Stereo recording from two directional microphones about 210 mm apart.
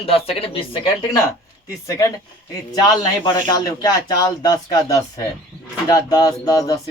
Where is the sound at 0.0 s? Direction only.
25° left (ahead or behind).